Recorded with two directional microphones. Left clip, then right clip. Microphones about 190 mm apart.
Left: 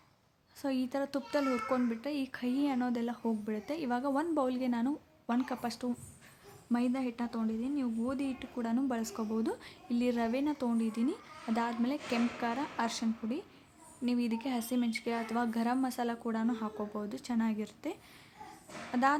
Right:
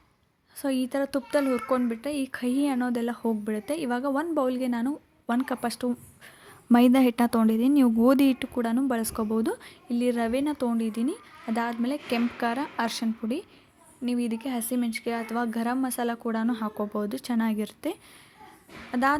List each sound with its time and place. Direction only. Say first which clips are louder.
0.6 s speech: right 7 dB; 25° right (ahead or behind)
6.7 s a woman's voice: right 14 dB; 45° right (ahead or behind); by 19.1 s 20° right (ahead or behind)